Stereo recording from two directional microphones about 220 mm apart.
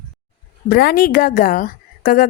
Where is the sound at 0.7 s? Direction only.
40° left (ahead or behind).